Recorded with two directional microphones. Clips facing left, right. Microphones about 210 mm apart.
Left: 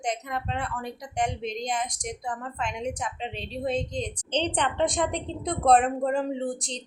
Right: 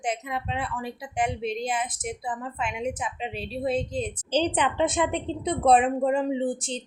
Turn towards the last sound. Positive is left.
turn(degrees=0)  # may be behind; listen again after turning